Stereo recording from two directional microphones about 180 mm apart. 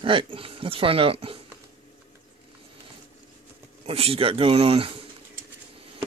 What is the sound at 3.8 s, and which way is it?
Speech, 35° right (ahead or behind).